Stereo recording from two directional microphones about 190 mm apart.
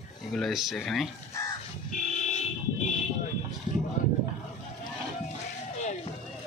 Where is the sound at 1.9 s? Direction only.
40° left (ahead or behind).